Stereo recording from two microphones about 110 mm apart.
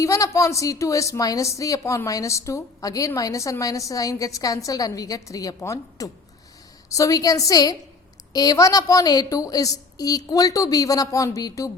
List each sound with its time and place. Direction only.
0.0 s a woman's voice: 30° left (ahead or behind)